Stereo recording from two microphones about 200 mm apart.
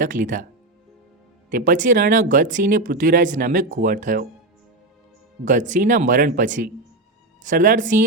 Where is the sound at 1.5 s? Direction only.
40° right (ahead or behind).